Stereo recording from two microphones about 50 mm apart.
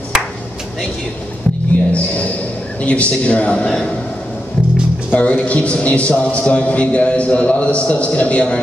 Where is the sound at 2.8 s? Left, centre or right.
Left.